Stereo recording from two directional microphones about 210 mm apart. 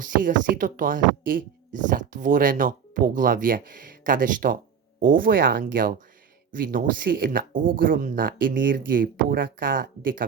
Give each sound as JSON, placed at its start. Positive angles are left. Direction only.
{"t": 0.0, "sound": "speech", "side_deg": -40}